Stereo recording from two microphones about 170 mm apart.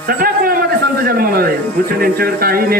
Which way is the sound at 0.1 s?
60° right (ahead or behind).